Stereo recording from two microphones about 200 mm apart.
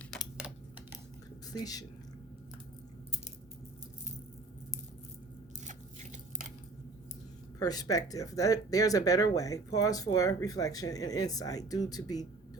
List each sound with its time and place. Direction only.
1.5 s speech: 20° left (ahead or behind)
5.6 s biting: 35° right (ahead or behind)
7.6 s speech: 20° left (ahead or behind)